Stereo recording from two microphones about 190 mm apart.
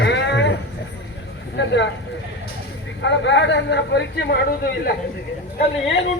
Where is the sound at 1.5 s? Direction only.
70° left (ahead or behind).